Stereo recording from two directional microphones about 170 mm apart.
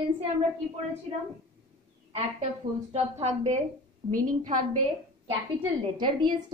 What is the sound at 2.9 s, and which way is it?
A woman's voice, 40° right (ahead or behind).